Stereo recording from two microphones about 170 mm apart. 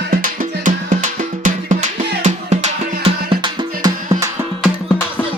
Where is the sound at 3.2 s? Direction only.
25° right (ahead or behind).